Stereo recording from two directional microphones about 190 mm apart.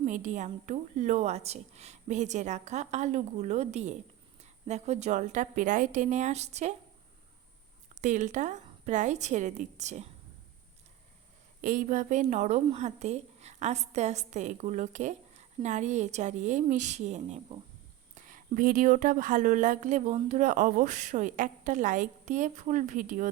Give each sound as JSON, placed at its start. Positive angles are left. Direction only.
{"t": 0.0, "sound": "a woman's voice", "side_deg": -40}
{"t": 8.0, "sound": "a woman's voice", "side_deg": -40}
{"t": 11.6, "sound": "a woman's voice", "side_deg": -40}